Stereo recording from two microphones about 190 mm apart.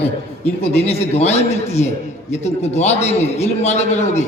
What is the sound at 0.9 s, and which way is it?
A man's voice, 35° left (ahead or behind).